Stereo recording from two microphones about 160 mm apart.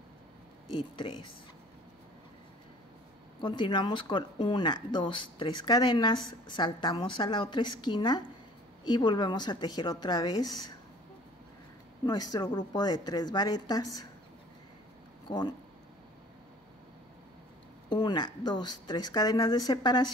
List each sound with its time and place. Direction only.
0.7 s speech: 30° left (ahead or behind)
3.3 s speech: 30° left (ahead or behind)
12.1 s speech: 25° left (ahead or behind)
15.2 s speech: 30° left (ahead or behind)
17.8 s speech: 30° left (ahead or behind)